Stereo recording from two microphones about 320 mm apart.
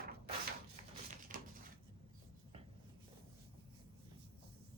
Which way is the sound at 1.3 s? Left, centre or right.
Right.